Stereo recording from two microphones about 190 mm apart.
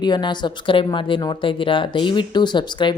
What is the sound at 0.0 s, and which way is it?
Speech, 25° left (ahead or behind).